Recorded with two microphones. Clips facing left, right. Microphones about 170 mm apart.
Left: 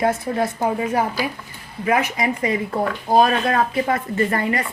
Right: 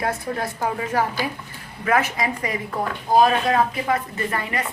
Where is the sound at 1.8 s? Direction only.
15° left (ahead or behind).